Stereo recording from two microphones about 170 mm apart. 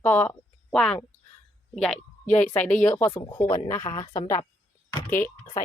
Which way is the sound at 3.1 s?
25° left (ahead or behind).